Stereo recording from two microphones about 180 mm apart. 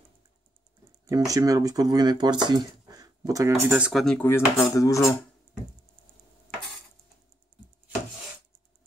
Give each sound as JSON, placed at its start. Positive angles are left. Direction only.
{"t": 1.0, "sound": "speech", "side_deg": -20}
{"t": 3.6, "sound": "speech", "side_deg": -5}